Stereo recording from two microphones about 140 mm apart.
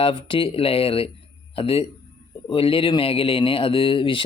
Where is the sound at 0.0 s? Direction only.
40° left (ahead or behind).